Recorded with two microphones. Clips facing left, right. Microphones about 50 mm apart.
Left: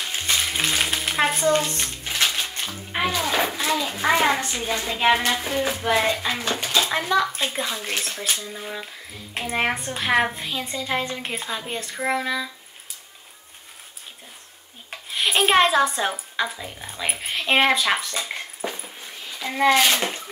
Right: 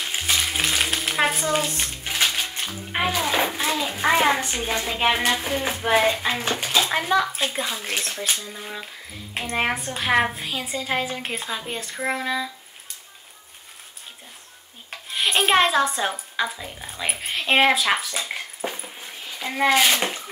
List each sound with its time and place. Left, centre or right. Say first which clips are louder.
0.1 s frying: right 1 dB; centre
2.3 s music: even; centre
3.2 s a sound: right 1 dB; centre
3.6 s a child's voice: even; centre
4.6 s a woman's voice: even; centre
14.9 s speech: even; centre
18.3 s dog: even; centre
19.4 s speech: left 1 dB; centre